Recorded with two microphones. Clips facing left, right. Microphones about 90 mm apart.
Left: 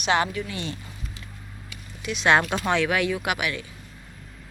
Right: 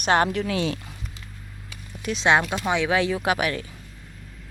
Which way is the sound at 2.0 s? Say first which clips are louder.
Right 3 dB; 45° right (ahead or behind).